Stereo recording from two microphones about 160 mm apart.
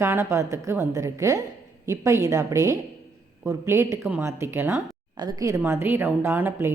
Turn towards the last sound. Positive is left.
turn(degrees=-15)  # may be behind; listen again after turning